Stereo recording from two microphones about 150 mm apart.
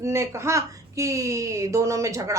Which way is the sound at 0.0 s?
20° right (ahead or behind).